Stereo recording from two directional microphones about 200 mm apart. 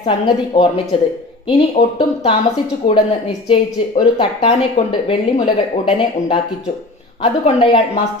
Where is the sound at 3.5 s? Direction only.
20° left (ahead or behind).